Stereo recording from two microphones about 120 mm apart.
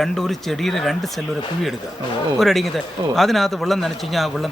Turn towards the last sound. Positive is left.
turn(degrees=0)  # may be behind; listen again after turning